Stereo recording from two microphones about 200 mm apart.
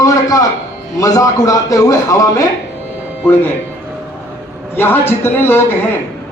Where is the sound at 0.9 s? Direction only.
15° left (ahead or behind).